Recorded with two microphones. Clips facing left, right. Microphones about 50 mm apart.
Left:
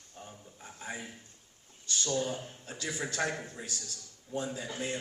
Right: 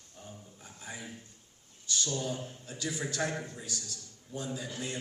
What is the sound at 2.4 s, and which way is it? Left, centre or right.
Speech, centre.